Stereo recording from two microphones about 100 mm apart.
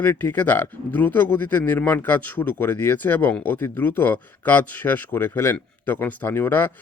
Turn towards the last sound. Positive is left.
turn(degrees=20)  # may be behind; listen again after turning